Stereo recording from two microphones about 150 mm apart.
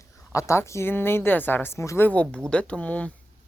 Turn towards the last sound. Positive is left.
turn(degrees=10)  # may be behind; listen again after turning